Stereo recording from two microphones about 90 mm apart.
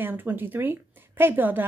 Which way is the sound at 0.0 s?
20° right (ahead or behind).